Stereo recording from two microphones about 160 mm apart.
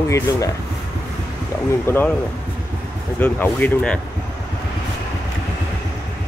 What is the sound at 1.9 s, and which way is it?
Speech, 15° left (ahead or behind).